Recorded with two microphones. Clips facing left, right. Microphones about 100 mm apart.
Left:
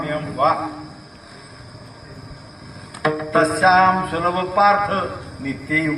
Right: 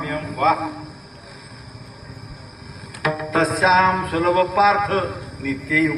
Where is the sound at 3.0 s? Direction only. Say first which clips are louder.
Left 3 dB; 35° left (ahead or behind).